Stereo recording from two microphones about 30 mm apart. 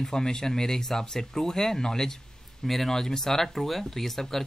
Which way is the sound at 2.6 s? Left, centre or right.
Centre.